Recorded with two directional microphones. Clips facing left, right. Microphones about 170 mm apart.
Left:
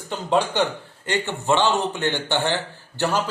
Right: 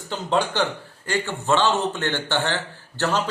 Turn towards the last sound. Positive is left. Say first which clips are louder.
# left 1 dB
turn(degrees=15)  # may be behind; listen again after turning